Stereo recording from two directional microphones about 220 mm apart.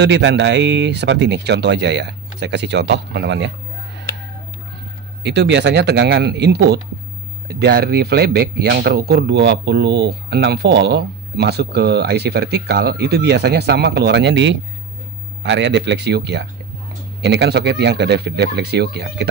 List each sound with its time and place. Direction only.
0.0 s speech: 50° right (ahead or behind)
5.2 s speech: 50° right (ahead or behind)